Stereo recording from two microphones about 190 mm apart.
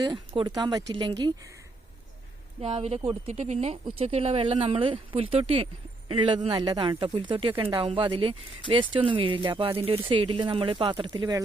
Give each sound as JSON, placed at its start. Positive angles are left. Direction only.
{"t": 0.0, "sound": "speech", "side_deg": -25}
{"t": 2.6, "sound": "speech", "side_deg": -35}